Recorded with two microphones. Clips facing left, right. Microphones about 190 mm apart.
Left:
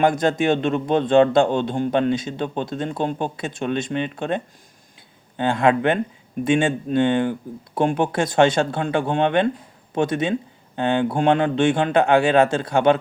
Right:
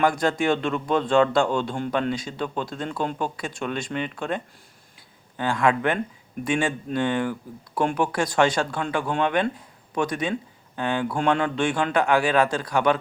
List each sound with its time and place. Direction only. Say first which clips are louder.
0.0 s speech: left 3 dB; 20° left (ahead or behind)